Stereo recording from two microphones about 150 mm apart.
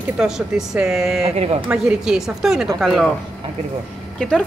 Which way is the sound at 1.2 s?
45° right (ahead or behind).